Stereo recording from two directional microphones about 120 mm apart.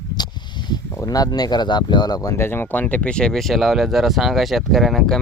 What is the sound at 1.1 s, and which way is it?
Speech, 30° left (ahead or behind).